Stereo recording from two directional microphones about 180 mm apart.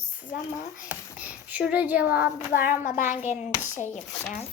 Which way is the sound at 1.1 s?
10° right (ahead or behind).